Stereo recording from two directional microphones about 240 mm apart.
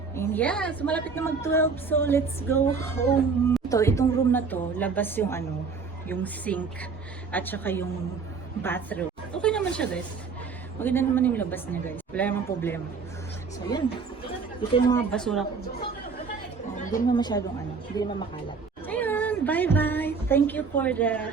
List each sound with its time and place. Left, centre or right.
0.2 s speech: centre
8.6 s a sound: centre
10.8 s speech: centre
14.3 s chatter: left
15.1 s a woman's voice: centre
16.7 s a sound: left
17.1 s speech: centre
18.9 s speech: centre